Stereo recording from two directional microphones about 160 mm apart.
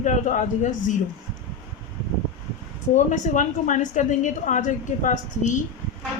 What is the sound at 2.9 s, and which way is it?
A woman's voice, 50° left (ahead or behind).